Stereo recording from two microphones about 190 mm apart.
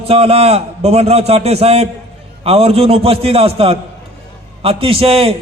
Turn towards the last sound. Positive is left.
turn(degrees=-30)  # may be behind; listen again after turning